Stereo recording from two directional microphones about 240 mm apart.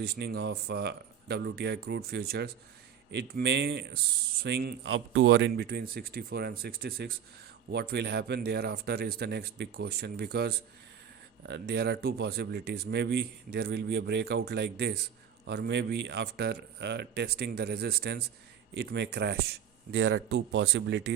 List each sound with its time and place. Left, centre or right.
0.0 s speech: right